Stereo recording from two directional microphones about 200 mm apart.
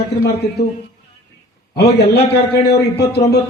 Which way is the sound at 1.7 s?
55° left (ahead or behind).